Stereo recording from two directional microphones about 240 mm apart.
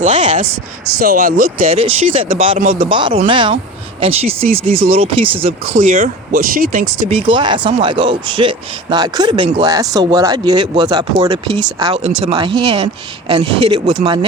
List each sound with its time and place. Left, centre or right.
0.0 s speech: right
1.6 s speech: right
5.8 s speech: right
7.1 s speech: right